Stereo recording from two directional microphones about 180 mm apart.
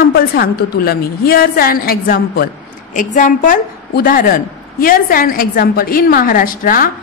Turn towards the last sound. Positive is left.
turn(degrees=50)  # may be behind; listen again after turning